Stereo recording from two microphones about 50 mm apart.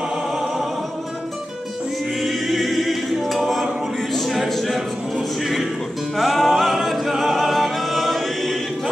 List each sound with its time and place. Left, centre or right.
2.2 s music: centre
6.1 s a capella: centre